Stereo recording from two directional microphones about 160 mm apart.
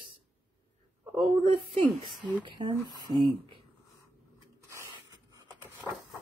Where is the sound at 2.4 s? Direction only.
30° right (ahead or behind).